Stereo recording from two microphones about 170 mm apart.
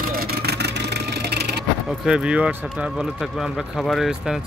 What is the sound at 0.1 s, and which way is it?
Vehicle, 65° right (ahead or behind).